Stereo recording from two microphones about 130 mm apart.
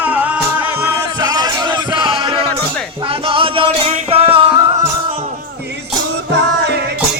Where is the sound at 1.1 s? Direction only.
30° right (ahead or behind); by 4.4 s 50° right (ahead or behind).